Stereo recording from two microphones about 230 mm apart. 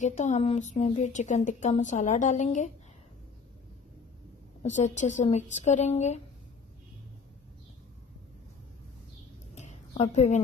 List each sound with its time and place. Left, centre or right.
0.0 s speech: left
4.6 s speech: left
9.6 s a sound: left